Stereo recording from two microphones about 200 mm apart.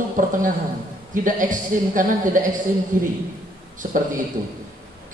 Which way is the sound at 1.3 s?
40° right (ahead or behind).